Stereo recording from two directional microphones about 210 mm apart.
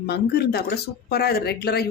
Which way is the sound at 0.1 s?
50° left (ahead or behind).